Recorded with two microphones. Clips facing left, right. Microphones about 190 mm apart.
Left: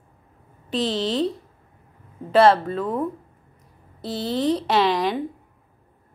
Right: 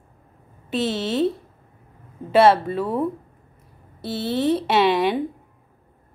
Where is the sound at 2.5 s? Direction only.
10° right (ahead or behind).